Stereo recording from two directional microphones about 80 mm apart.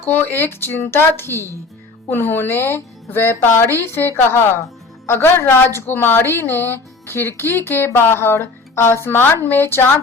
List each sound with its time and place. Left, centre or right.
0.0 s a woman's voice: left